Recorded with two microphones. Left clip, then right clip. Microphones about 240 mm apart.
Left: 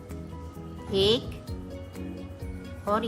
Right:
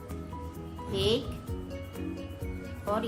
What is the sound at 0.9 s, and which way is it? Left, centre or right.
Speech, centre.